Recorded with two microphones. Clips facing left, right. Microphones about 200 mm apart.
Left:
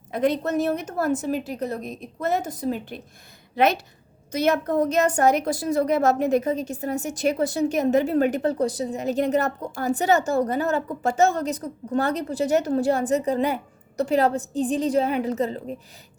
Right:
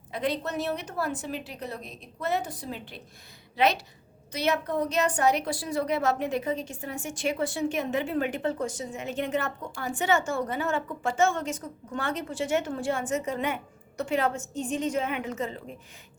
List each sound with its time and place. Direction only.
0.1 s a woman's voice: 45° left (ahead or behind)